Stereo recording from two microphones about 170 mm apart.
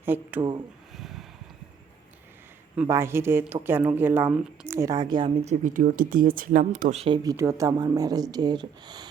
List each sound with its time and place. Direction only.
0.0 s speech: 10° right (ahead or behind)
0.9 s a sound: centre (ahead or behind)
2.8 s speech: 15° right (ahead or behind); by 7.2 s 35° right (ahead or behind)
7.2 s speech: 20° right (ahead or behind)